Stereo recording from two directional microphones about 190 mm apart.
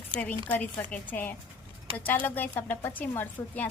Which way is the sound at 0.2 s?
10° left (ahead or behind).